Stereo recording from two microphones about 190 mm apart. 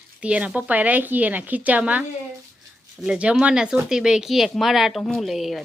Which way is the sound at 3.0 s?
5° right (ahead or behind).